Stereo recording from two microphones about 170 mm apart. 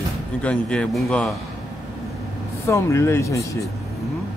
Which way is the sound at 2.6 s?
15° left (ahead or behind).